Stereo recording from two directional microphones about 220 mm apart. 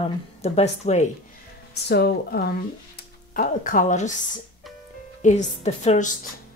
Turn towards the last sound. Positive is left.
turn(degrees=30)  # may be behind; listen again after turning